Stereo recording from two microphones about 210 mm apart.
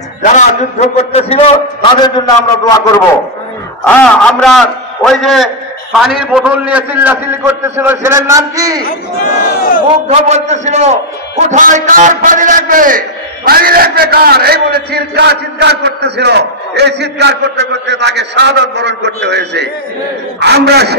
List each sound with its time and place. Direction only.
0.2 s a man's voice: 35° left (ahead or behind); by 2.8 s 15° left (ahead or behind)
3.8 s a man's voice: 5° left (ahead or behind); by 8.8 s 15° right (ahead or behind)
10.0 s a man's voice: 30° right (ahead or behind); by 21.0 s 50° right (ahead or behind)